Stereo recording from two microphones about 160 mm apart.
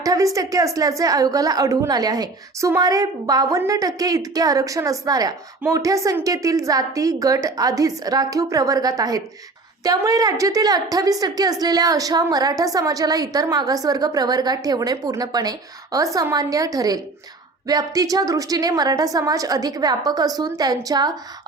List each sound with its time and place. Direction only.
0.0 s a woman's voice: 20° right (ahead or behind)